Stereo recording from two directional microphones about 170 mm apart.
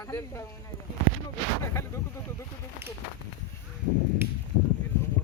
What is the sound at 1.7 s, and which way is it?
Speech, 15° left (ahead or behind).